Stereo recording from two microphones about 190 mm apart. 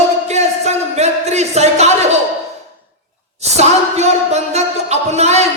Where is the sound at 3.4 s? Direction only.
35° right (ahead or behind).